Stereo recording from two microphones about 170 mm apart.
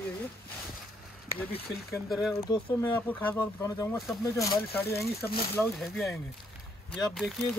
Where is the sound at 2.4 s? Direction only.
25° left (ahead or behind).